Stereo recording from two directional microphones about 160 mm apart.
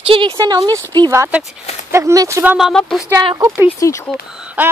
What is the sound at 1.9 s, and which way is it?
Speech, 20° right (ahead or behind).